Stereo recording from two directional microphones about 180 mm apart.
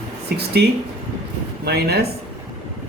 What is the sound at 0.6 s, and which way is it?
Speech, 65° right (ahead or behind).